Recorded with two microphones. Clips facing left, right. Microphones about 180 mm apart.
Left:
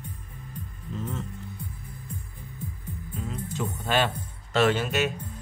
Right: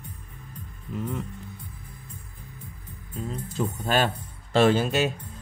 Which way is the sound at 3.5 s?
40° right (ahead or behind).